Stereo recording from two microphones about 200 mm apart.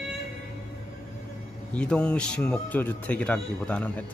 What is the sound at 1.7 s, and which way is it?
A man's voice, 5° left (ahead or behind).